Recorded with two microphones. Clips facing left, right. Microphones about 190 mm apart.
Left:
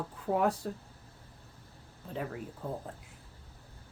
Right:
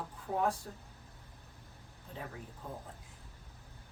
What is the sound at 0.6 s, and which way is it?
Speech, 75° left (ahead or behind).